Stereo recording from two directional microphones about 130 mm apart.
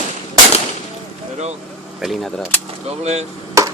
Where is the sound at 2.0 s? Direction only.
Centre (ahead or behind).